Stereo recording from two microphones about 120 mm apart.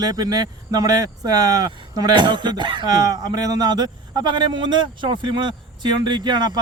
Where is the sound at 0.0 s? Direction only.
35° right (ahead or behind).